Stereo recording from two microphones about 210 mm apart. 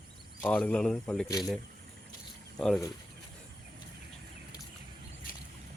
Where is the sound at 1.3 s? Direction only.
15° left (ahead or behind).